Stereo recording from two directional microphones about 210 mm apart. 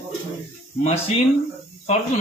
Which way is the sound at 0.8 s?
30° left (ahead or behind).